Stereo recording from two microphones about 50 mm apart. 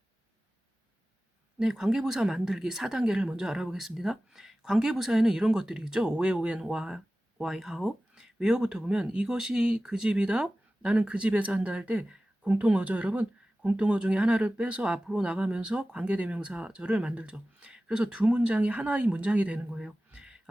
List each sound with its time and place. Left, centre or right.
1.5 s speech: centre